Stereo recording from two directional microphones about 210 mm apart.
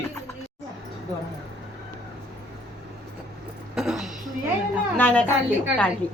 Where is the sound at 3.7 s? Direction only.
Centre (ahead or behind).